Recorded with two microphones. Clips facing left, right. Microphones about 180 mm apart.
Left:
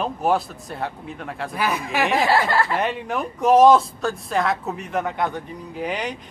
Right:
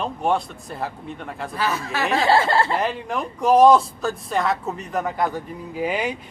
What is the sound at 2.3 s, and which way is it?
Speech, 25° right (ahead or behind).